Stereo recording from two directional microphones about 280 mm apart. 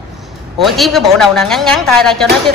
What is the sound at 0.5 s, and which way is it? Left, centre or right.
A woman's voice, centre.